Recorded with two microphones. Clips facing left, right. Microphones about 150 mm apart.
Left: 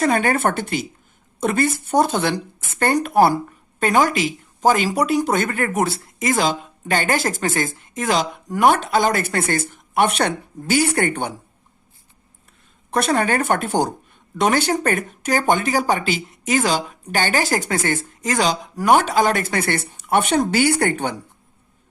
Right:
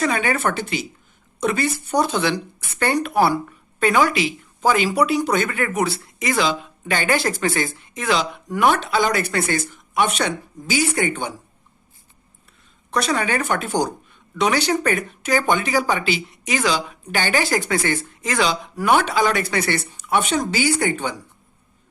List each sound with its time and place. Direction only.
0.0 s speech: 50° left (ahead or behind)
12.9 s speech: 55° left (ahead or behind)